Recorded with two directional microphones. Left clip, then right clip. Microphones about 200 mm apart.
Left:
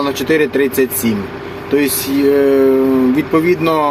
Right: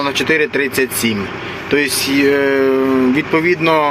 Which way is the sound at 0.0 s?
5° left (ahead or behind).